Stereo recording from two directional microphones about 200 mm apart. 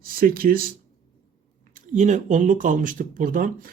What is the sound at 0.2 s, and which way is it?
Speech, 45° right (ahead or behind).